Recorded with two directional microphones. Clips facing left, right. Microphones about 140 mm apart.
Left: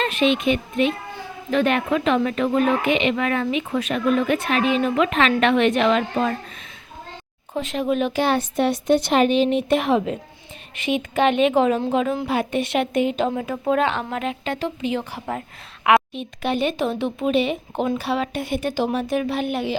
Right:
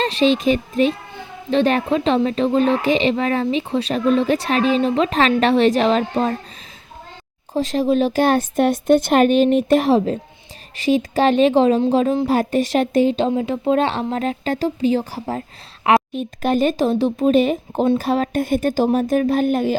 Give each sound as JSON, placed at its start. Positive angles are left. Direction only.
{"t": 0.0, "sound": "speech", "side_deg": -35}
{"t": 7.5, "sound": "speech", "side_deg": -35}